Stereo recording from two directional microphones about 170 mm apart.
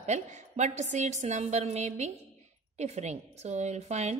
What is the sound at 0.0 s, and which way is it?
A woman's voice, 45° right (ahead or behind).